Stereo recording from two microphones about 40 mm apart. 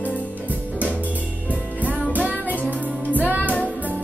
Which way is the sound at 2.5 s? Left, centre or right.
Left.